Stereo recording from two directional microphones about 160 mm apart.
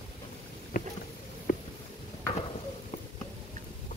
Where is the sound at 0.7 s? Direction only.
65° left (ahead or behind).